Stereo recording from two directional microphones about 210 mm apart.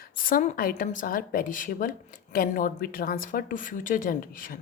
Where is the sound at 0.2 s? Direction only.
40° left (ahead or behind).